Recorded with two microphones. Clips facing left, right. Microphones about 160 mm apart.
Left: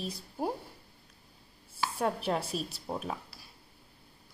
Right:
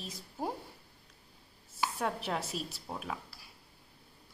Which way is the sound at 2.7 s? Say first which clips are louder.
Left 4 dB; 20° left (ahead or behind).